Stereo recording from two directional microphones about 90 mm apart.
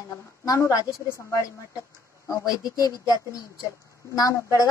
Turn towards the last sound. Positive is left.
turn(degrees=40)  # may be behind; listen again after turning